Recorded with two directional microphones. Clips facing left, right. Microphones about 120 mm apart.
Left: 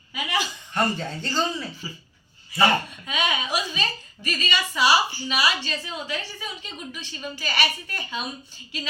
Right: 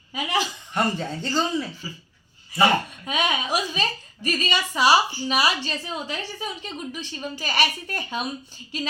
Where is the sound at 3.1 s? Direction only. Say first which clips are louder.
Right 2 dB; 40° right (ahead or behind).